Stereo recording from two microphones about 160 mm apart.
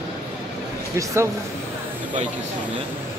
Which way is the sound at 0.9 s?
20° right (ahead or behind).